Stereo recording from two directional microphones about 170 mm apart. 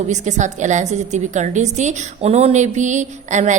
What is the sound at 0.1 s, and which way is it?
A woman's voice, 45° right (ahead or behind).